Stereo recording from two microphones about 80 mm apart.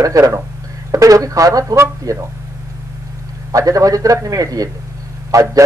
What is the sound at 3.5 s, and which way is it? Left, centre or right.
Speech, right.